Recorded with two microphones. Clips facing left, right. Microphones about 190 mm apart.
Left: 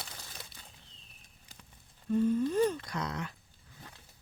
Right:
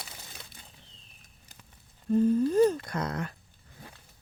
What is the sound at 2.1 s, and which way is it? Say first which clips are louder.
Humming: right 4 dB; 40° right (ahead or behind).